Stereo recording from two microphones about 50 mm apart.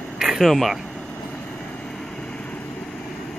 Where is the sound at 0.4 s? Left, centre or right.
Centre.